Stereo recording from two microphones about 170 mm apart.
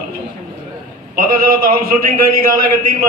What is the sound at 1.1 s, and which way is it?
A man's voice, 55° right (ahead or behind).